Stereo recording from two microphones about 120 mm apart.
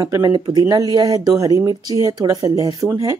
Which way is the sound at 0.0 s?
25° right (ahead or behind).